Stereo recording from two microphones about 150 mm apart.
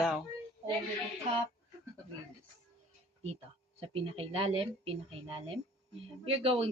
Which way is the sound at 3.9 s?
40° right (ahead or behind).